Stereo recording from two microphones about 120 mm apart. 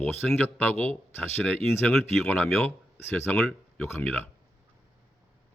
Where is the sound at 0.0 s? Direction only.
15° left (ahead or behind).